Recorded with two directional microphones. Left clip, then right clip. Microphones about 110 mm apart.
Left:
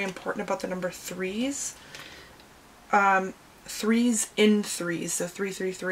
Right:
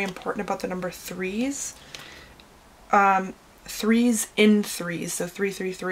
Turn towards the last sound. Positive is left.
turn(degrees=-25)  # may be behind; listen again after turning